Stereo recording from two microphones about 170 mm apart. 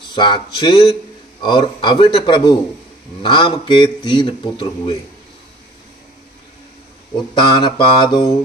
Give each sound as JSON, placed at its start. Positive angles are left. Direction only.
{"t": 0.1, "sound": "a man's voice", "side_deg": 25}
{"t": 7.3, "sound": "a man's voice", "side_deg": 25}